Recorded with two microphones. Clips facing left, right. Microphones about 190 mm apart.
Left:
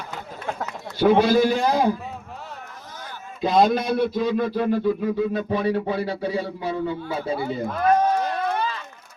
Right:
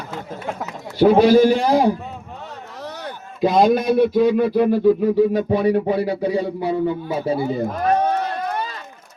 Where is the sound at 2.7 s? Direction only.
75° right (ahead or behind).